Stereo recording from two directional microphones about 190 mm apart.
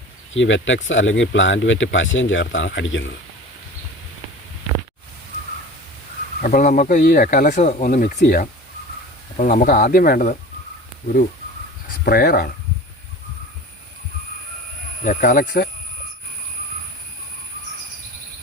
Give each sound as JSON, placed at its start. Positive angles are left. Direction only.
{"t": 0.3, "sound": "speech", "side_deg": 75}
{"t": 6.4, "sound": "speech", "side_deg": 45}
{"t": 12.0, "sound": "speech", "side_deg": 55}
{"t": 15.0, "sound": "speech", "side_deg": 40}